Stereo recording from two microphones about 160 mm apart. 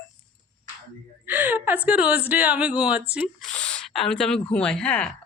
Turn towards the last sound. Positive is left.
turn(degrees=5)  # may be behind; listen again after turning